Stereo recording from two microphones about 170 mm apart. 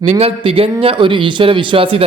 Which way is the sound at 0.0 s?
35° right (ahead or behind).